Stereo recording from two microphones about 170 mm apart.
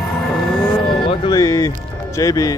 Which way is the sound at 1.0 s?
30° left (ahead or behind).